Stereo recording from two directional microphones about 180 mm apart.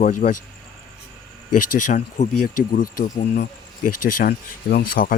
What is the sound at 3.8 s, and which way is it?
Speech, 55° left (ahead or behind).